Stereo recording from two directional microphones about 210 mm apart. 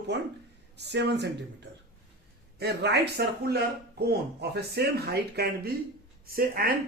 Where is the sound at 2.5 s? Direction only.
50° right (ahead or behind).